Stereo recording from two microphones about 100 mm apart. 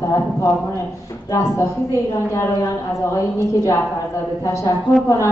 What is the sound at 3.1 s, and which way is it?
A woman's voice, 30° left (ahead or behind).